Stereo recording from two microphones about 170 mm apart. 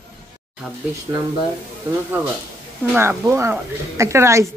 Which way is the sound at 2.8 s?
10° right (ahead or behind).